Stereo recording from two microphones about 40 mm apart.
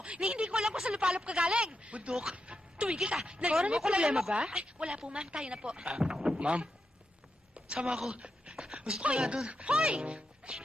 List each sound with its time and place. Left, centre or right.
0.2 s a woman's voice: centre
7.5 s a sound: right
8.1 s dog: right
8.5 s speech: right
9.5 s a child's voice: right